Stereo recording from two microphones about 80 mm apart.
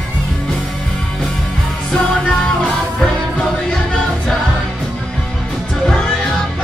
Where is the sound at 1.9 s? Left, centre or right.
Centre.